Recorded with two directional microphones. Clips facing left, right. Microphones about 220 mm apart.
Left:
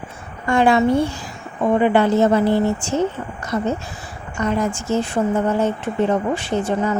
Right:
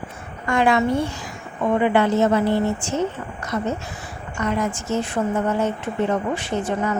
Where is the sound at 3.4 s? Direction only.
30° left (ahead or behind).